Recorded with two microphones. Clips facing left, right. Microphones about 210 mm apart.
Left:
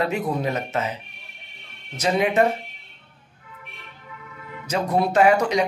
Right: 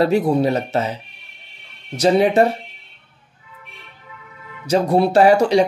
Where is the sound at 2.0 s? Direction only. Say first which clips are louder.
Right 6 dB; 35° right (ahead or behind).